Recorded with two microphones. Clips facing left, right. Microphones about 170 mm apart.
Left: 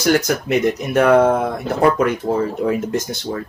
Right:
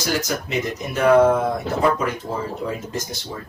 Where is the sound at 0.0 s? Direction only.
65° left (ahead or behind).